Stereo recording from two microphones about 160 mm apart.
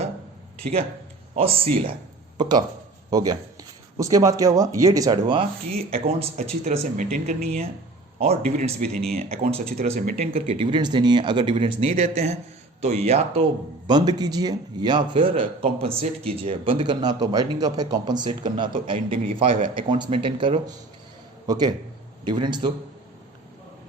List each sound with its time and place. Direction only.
1.4 s speech: 35° right (ahead or behind)
2.4 s a man's voice: 25° right (ahead or behind)
13.8 s a man's voice: 25° right (ahead or behind)